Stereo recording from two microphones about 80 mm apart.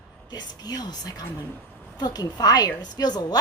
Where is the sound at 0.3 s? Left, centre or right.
Left.